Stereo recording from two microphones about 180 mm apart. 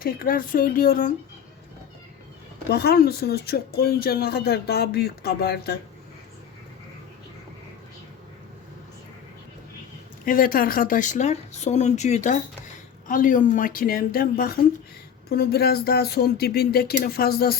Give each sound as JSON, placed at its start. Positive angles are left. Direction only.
{"t": 0.0, "sound": "speech", "side_deg": 50}
{"t": 2.6, "sound": "speech", "side_deg": 65}
{"t": 10.2, "sound": "speech", "side_deg": 50}